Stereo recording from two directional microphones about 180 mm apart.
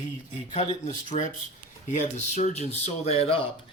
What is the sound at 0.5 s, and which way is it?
Speech, 40° left (ahead or behind).